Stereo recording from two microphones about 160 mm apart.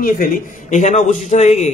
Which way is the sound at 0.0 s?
55° left (ahead or behind).